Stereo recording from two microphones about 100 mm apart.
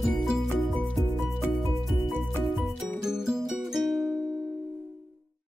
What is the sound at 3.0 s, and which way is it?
Music, 5° right (ahead or behind).